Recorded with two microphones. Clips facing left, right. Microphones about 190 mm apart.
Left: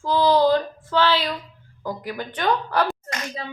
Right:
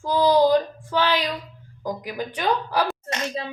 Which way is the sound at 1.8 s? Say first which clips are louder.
Right 1 dB; 15° right (ahead or behind).